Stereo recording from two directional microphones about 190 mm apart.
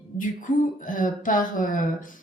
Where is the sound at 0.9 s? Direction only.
45° left (ahead or behind).